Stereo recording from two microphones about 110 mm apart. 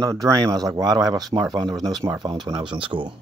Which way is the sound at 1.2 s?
Centre (ahead or behind).